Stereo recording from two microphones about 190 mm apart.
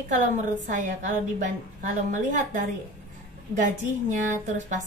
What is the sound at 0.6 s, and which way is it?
A woman's voice, 40° right (ahead or behind).